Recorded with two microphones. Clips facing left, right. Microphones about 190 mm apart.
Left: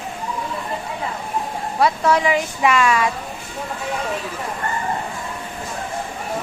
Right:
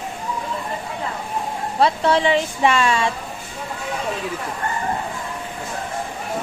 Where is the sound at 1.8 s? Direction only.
30° right (ahead or behind).